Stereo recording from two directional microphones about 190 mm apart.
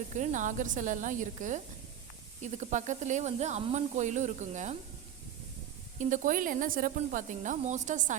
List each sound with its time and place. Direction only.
0.1 s speech: 40° right (ahead or behind)
6.0 s speech: 45° right (ahead or behind)